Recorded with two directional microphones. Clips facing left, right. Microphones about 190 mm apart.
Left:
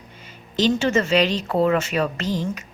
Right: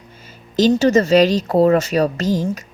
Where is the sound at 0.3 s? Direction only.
40° right (ahead or behind).